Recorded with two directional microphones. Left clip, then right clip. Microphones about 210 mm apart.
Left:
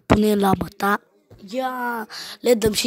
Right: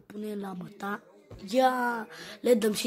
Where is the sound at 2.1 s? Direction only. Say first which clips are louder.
Left 8 dB; 40° left (ahead or behind).